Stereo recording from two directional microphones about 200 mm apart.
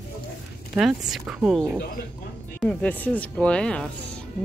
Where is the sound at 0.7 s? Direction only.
5° right (ahead or behind).